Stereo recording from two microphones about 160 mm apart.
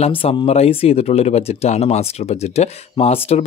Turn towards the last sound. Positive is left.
turn(degrees=40)  # may be behind; listen again after turning